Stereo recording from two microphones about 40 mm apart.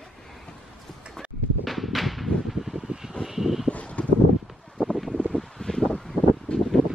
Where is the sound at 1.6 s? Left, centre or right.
Centre.